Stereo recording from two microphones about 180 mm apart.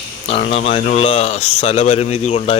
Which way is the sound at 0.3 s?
35° left (ahead or behind).